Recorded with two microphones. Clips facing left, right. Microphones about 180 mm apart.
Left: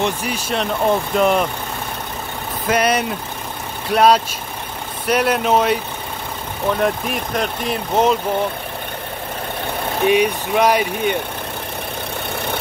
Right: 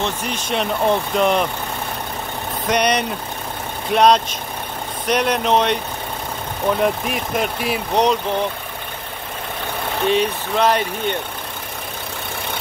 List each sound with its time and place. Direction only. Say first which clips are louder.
0.0 s speech: left 2 dB; 10° left (ahead or behind)
2.6 s speech: left 1 dB; 5° left (ahead or behind)
6.8 s speech: even; centre (ahead or behind)
10.0 s speech: left 3 dB; 10° left (ahead or behind)